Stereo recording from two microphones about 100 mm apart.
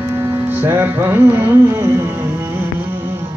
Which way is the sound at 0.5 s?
20° right (ahead or behind).